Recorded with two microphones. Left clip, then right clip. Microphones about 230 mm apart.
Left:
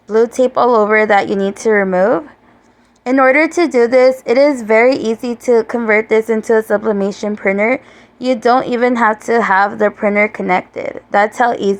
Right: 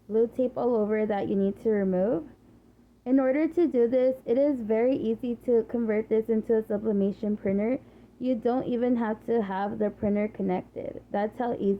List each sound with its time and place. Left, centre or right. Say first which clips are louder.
0.1 s speech: left 14 dB; centre
11.5 s a woman's voice: left 12 dB; left